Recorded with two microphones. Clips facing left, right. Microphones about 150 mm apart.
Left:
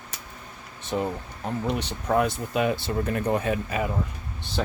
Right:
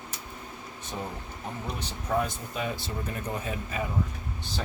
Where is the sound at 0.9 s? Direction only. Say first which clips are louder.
Left 9 dB; 70° left (ahead or behind).